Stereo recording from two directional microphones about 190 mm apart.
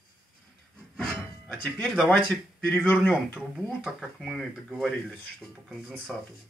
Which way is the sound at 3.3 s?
Centre (ahead or behind).